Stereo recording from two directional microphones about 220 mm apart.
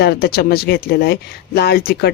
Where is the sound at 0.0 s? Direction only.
45° left (ahead or behind).